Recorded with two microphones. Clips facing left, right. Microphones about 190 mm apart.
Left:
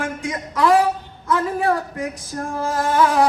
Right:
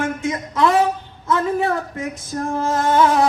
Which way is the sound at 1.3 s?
25° right (ahead or behind).